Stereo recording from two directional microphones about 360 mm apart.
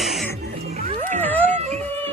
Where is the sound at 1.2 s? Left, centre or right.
Centre.